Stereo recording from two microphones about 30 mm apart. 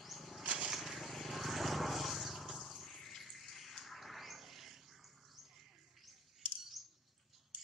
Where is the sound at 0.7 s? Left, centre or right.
Centre.